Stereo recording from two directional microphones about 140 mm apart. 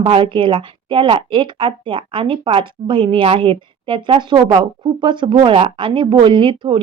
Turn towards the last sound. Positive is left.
turn(degrees=-40)  # may be behind; listen again after turning